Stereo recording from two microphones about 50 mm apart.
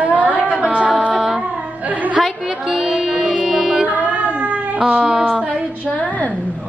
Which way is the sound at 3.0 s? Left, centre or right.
Centre.